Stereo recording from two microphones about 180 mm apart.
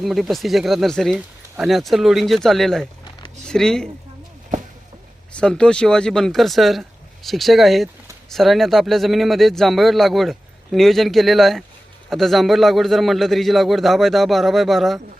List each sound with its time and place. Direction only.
0.0 s speech: centre (ahead or behind)
3.0 s a sound: 25° left (ahead or behind)
3.4 s speech: 5° left (ahead or behind)
5.3 s speech: 5° left (ahead or behind)